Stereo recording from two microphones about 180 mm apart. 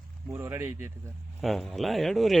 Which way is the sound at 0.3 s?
15° right (ahead or behind).